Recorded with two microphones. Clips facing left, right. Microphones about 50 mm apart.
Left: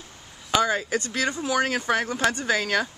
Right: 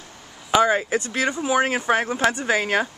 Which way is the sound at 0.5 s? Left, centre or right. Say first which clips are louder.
Right 4 dB; right.